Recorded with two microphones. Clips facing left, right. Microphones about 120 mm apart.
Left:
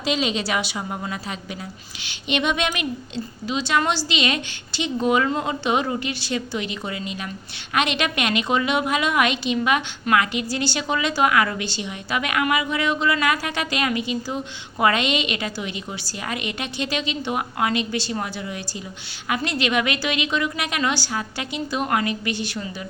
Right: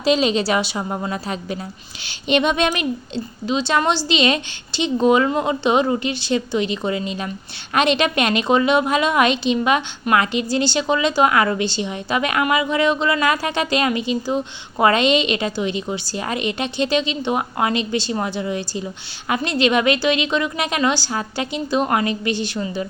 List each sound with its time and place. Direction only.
0.0 s a woman's voice: 35° right (ahead or behind)